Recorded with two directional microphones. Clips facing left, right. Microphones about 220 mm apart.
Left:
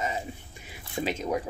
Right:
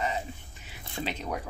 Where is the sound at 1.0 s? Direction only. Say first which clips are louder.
Left 5 dB; 20° left (ahead or behind).